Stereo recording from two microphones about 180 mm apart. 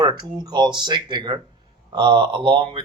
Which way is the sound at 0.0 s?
25° right (ahead or behind).